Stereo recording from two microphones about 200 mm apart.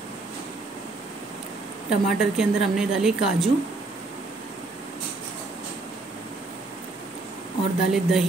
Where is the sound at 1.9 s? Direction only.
Centre (ahead or behind).